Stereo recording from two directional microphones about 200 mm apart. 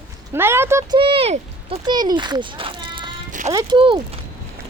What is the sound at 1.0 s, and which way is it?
Speech, 25° right (ahead or behind).